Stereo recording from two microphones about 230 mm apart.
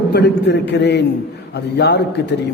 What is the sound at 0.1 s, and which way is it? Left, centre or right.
Speech, left.